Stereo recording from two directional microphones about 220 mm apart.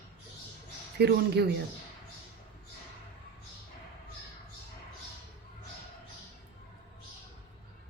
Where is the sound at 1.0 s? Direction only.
50° right (ahead or behind).